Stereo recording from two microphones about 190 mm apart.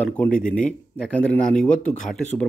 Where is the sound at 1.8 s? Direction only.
40° left (ahead or behind).